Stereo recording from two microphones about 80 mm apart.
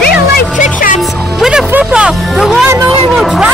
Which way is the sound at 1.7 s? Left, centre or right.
Centre.